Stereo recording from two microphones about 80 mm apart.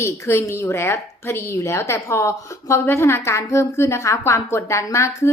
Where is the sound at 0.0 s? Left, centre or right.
Left.